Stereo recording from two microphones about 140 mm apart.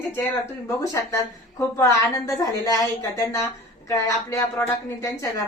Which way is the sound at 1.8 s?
20° left (ahead or behind).